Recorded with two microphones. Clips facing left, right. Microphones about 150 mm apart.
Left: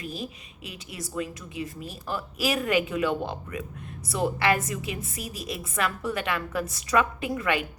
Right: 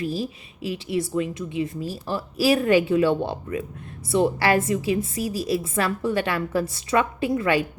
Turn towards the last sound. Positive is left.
turn(degrees=-30)  # may be behind; listen again after turning